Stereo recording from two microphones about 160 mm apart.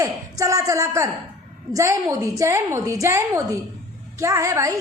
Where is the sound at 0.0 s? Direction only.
20° right (ahead or behind).